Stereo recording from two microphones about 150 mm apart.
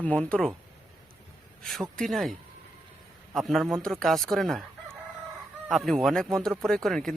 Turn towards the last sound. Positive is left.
turn(degrees=0)  # may be behind; listen again after turning